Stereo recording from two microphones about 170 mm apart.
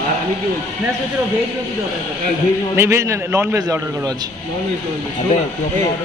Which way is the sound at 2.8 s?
15° right (ahead or behind).